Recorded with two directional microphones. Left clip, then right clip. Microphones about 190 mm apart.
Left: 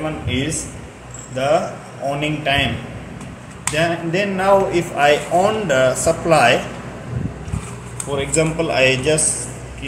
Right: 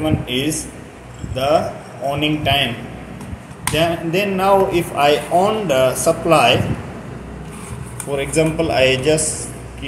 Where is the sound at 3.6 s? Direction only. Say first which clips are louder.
Right 1 dB; 5° right (ahead or behind).